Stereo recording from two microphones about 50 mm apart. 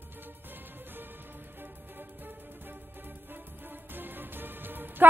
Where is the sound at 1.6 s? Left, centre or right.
Right.